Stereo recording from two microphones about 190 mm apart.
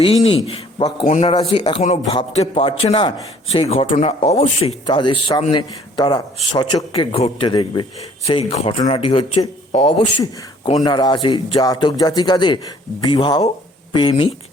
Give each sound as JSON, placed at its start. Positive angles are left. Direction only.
{"t": 0.0, "sound": "a man's voice", "side_deg": 30}